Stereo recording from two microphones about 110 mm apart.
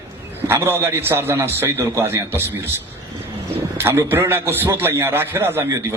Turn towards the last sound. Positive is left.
turn(degrees=-20)  # may be behind; listen again after turning